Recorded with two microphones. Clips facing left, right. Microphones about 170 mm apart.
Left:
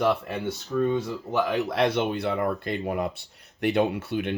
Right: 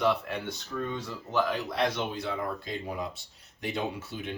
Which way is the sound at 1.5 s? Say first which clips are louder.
Left 6 dB; 65° left (ahead or behind).